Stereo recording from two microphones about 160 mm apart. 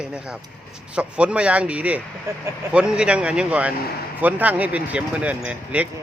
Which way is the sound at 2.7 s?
5° right (ahead or behind).